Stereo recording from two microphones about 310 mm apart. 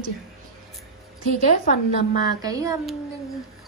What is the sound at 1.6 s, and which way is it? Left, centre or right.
Speech, left.